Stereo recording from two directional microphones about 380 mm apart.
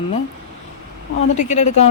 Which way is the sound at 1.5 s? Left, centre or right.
Centre.